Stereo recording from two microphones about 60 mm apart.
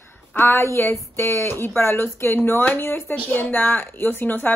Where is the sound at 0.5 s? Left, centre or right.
Left.